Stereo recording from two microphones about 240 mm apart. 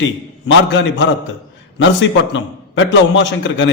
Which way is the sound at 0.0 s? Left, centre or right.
Left.